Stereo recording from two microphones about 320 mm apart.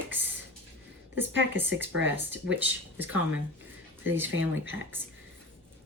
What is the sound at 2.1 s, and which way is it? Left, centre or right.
Speech, centre.